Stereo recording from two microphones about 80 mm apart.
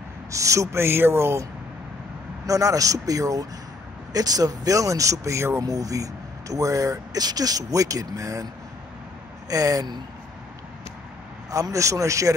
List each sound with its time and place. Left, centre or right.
0.3 s speech: right
2.4 s speech: right
5.6 s speech: right
9.5 s speech: right
11.5 s speech: right